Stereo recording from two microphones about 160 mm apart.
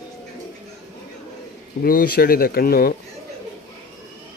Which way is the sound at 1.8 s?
65° left (ahead or behind).